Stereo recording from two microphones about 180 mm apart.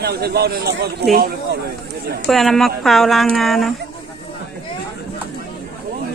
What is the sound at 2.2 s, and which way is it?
A man's voice, centre (ahead or behind).